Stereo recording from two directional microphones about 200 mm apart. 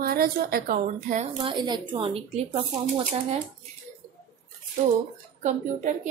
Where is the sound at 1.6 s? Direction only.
25° right (ahead or behind).